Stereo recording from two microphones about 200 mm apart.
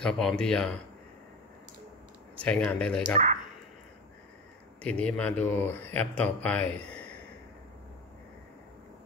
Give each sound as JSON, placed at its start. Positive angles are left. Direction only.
{"t": 0.0, "sound": "speech", "side_deg": 0}
{"t": 2.3, "sound": "speech", "side_deg": 5}
{"t": 4.8, "sound": "speech", "side_deg": 5}